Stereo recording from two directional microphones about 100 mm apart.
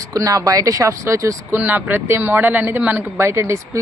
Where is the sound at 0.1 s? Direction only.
35° right (ahead or behind).